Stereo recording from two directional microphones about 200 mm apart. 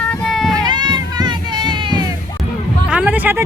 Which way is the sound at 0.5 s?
20° right (ahead or behind).